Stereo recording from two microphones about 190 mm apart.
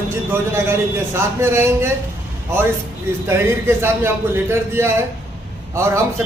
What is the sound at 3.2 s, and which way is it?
A man's voice, 10° right (ahead or behind).